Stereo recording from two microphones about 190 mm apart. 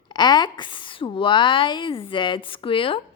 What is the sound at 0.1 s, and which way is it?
A woman's voice, 20° left (ahead or behind).